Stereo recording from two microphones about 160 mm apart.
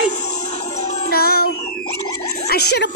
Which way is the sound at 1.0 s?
70° left (ahead or behind).